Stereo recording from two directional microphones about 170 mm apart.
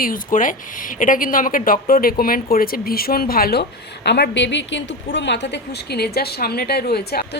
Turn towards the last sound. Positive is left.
turn(degrees=65)  # may be behind; listen again after turning